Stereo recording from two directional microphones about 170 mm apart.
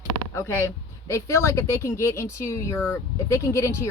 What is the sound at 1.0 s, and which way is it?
Speech, 15° left (ahead or behind).